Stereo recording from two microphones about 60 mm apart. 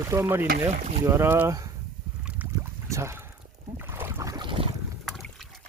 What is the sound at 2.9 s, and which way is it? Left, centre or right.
Speech, right.